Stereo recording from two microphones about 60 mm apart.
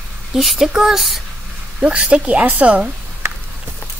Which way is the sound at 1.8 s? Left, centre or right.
Centre.